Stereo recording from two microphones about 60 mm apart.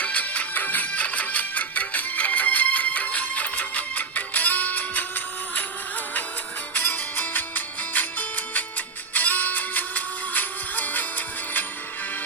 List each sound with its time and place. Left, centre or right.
0.0 s music: left
6.7 s music: left